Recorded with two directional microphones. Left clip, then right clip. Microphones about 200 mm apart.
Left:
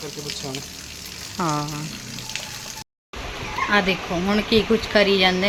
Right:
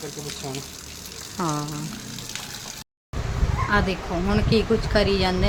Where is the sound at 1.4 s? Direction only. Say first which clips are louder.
Left 3 dB; centre (ahead or behind).